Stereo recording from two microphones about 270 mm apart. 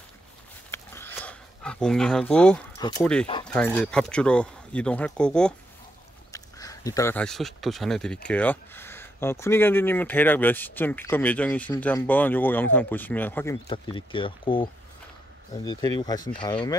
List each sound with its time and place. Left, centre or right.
0.7 s a sound: centre
3.0 s speech: centre
13.7 s speech: centre